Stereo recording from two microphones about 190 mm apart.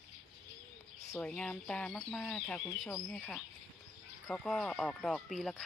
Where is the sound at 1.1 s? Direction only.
5° left (ahead or behind).